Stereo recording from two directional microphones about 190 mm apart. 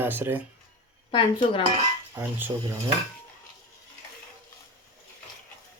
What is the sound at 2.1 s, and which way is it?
Speech, 10° right (ahead or behind).